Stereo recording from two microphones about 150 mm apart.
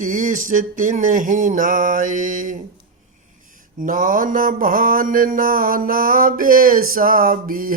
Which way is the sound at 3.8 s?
65° right (ahead or behind).